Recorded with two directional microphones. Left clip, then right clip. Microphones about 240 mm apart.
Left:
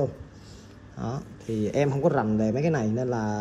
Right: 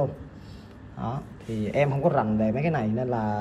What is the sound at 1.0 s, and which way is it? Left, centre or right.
Speech, left.